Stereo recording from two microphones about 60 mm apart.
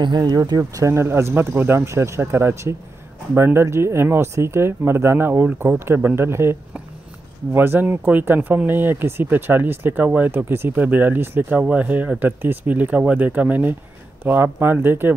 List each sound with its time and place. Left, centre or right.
0.4 s speech: right
1.9 s speech: right
10.8 s speech: right
11.5 s speech: right